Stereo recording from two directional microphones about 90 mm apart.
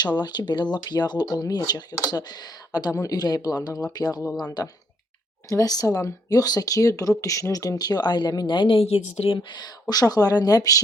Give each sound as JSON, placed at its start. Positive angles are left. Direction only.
{"t": 0.0, "sound": "speech", "side_deg": 50}
{"t": 9.9, "sound": "speech", "side_deg": 45}